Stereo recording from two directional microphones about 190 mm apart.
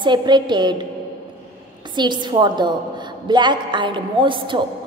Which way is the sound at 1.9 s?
25° right (ahead or behind).